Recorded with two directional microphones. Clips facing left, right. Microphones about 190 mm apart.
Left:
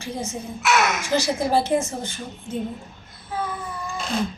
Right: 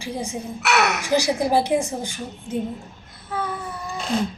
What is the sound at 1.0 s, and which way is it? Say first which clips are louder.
A woman's voice: right 2 dB; 15° right (ahead or behind).